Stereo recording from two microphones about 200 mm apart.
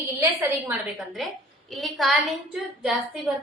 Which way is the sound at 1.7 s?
Centre (ahead or behind).